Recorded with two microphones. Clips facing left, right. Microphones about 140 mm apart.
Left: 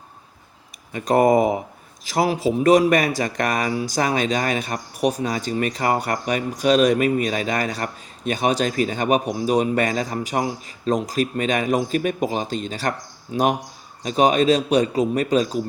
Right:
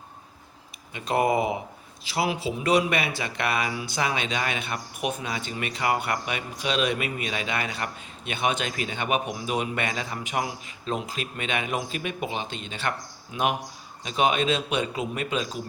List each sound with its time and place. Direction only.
0.9 s a man's voice: 45° left (ahead or behind)